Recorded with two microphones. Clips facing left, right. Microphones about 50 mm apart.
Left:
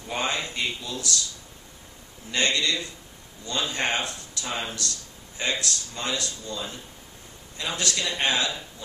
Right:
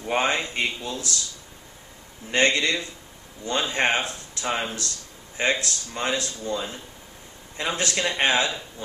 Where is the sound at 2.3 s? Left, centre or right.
Right.